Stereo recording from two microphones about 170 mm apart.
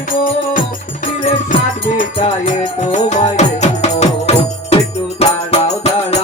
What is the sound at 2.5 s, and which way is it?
Music, 45° left (ahead or behind).